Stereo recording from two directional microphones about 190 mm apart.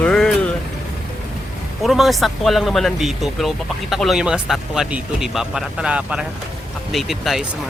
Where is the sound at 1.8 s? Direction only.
Centre (ahead or behind).